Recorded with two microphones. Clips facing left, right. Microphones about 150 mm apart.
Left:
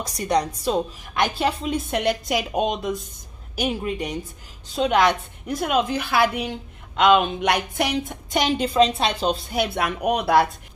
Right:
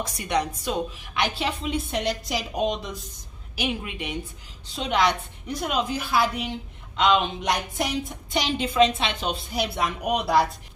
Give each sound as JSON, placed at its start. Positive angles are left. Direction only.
{"t": 0.0, "sound": "a woman's voice", "side_deg": 35}
{"t": 3.5, "sound": "a woman's voice", "side_deg": 40}
{"t": 7.0, "sound": "speech", "side_deg": 55}
{"t": 8.3, "sound": "a woman's voice", "side_deg": 45}
{"t": 9.5, "sound": "speech", "side_deg": 60}